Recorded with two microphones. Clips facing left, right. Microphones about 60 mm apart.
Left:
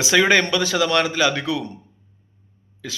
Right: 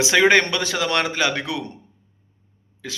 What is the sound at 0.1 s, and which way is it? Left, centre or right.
A man's voice, right.